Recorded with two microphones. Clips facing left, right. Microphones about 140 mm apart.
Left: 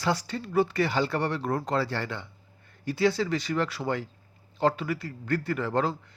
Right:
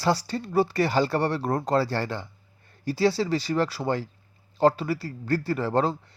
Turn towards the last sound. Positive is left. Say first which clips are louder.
# right 3 dB
turn(degrees=-35)  # may be behind; listen again after turning